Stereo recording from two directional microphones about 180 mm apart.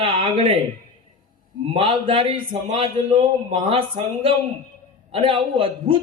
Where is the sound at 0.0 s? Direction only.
30° right (ahead or behind).